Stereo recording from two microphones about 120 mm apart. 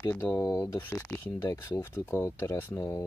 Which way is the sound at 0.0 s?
25° left (ahead or behind).